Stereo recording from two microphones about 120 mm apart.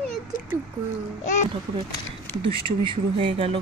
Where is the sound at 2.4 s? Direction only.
45° right (ahead or behind).